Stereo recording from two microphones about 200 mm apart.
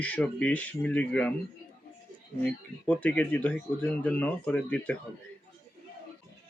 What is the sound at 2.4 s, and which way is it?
Speech, 5° left (ahead or behind).